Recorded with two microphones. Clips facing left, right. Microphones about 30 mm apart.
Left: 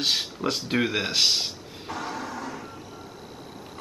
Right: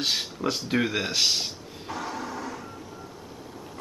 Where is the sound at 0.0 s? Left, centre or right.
Centre.